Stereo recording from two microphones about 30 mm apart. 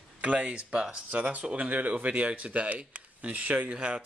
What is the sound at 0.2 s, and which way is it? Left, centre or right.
Speech, right.